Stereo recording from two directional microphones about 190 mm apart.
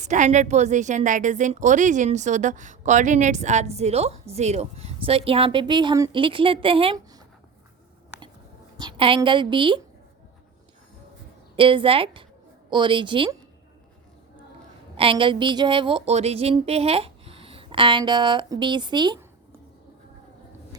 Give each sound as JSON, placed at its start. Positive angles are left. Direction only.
{"t": 0.0, "sound": "a woman's voice", "side_deg": -40}
{"t": 8.8, "sound": "a woman's voice", "side_deg": -25}
{"t": 11.5, "sound": "a woman's voice", "side_deg": -25}
{"t": 14.9, "sound": "a woman's voice", "side_deg": -30}